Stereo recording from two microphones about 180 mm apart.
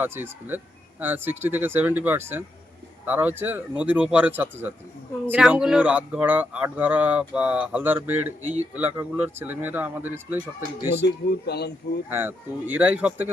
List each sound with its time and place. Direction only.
0.0 s speech: 10° right (ahead or behind)
10.9 s speech: 70° left (ahead or behind)
12.0 s speech: 10° right (ahead or behind)